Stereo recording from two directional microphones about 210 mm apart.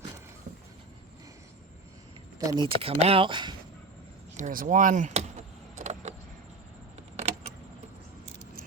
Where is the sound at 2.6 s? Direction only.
25° right (ahead or behind).